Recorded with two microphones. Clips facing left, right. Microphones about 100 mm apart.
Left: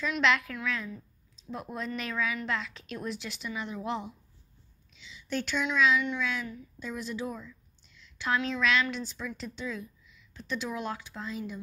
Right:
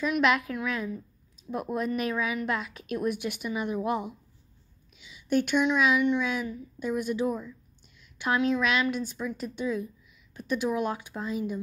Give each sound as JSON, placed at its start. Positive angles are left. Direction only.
{"t": 0.0, "sound": "speech", "side_deg": -10}